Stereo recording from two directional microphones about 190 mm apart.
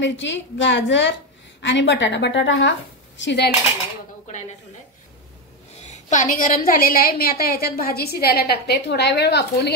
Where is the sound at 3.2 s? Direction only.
65° left (ahead or behind).